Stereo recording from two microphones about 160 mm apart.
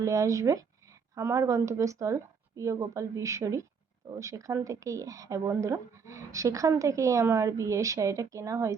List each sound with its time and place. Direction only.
0.0 s speech: 20° right (ahead or behind)